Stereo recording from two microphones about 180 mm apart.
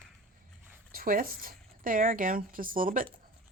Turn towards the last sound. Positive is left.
turn(degrees=-50)  # may be behind; listen again after turning